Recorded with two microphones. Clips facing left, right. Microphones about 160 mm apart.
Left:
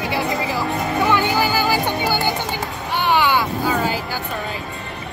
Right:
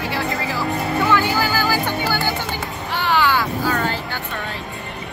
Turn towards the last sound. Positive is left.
turn(degrees=10)  # may be behind; listen again after turning